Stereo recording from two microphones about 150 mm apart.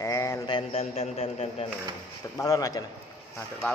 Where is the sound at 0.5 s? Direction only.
45° left (ahead or behind).